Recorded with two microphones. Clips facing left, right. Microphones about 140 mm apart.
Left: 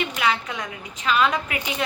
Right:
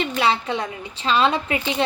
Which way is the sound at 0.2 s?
30° right (ahead or behind).